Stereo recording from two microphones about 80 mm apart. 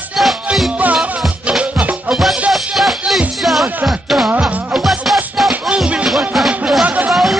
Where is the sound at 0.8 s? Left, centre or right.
Centre.